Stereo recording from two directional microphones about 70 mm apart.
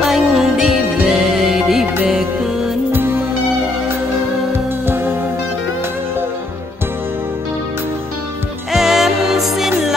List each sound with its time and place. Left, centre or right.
0.0 s music: centre
4.5 s music: right
8.7 s music: centre